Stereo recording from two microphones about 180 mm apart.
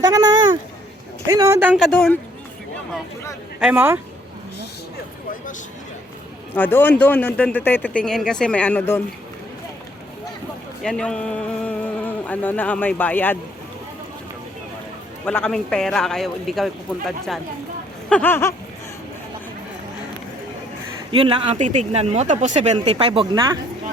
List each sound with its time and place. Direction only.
0.0 s a sound: 20° right (ahead or behind)
1.3 s speech: 15° right (ahead or behind); by 2.1 s 5° left (ahead or behind)
3.6 s speech: 10° right (ahead or behind)
6.5 s speech: 10° left (ahead or behind)
10.8 s speech: 5° left (ahead or behind)
15.2 s a man's voice: 5° left (ahead or behind)
18.1 s speech: 10° left (ahead or behind)
21.1 s speech: 30° right (ahead or behind)